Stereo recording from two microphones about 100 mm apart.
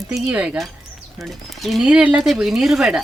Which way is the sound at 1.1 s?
Centre (ahead or behind).